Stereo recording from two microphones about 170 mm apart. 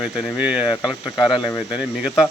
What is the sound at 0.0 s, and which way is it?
Speech, 5° right (ahead or behind).